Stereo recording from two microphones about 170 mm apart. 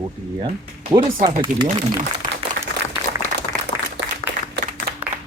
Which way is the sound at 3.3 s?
70° right (ahead or behind).